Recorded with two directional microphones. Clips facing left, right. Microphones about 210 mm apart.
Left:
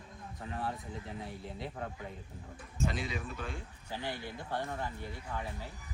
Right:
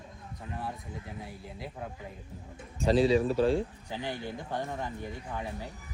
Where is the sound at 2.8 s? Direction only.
35° right (ahead or behind).